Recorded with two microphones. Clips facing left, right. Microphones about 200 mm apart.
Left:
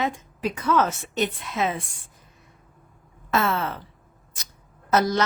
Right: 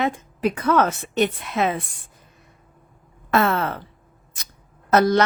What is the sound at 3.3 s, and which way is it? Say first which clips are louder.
Speech: right 4 dB; 60° right (ahead or behind).